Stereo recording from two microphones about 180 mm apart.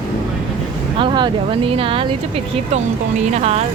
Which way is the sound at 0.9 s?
25° right (ahead or behind).